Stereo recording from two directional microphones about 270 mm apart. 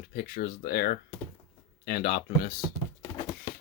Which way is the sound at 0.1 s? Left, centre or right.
Left.